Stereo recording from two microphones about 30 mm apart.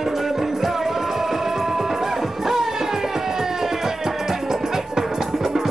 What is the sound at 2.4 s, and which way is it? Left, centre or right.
Music, centre.